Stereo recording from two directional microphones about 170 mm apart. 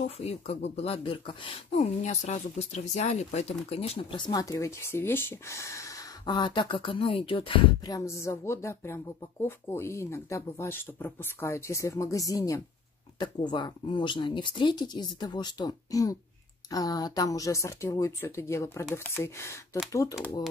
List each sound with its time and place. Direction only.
0.0 s speech: 40° left (ahead or behind); by 20.4 s 20° left (ahead or behind)